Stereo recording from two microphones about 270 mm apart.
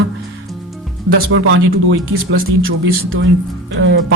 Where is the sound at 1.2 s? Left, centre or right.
Right.